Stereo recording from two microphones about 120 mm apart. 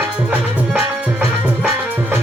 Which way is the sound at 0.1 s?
10° right (ahead or behind).